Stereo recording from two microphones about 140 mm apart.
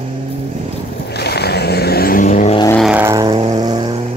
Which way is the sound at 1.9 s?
90° left.